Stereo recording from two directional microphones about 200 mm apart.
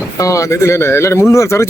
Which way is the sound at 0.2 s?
15° left (ahead or behind).